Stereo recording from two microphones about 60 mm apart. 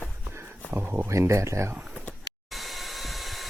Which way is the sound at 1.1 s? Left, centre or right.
Right.